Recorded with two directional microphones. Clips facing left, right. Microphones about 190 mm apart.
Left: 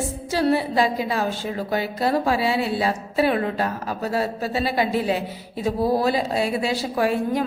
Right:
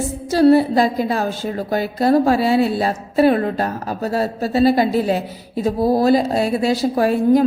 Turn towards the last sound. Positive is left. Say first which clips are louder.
# right 7 dB
turn(degrees=-40)  # may be behind; listen again after turning